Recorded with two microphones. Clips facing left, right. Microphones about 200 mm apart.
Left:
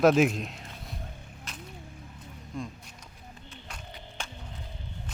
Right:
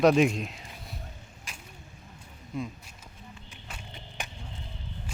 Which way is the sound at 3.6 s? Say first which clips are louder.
Right 1 dB; 5° right (ahead or behind).